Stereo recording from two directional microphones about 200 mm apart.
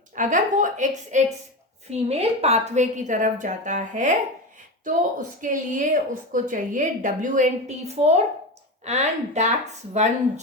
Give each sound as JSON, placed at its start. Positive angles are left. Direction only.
{"t": 0.2, "sound": "a woman's voice", "side_deg": -40}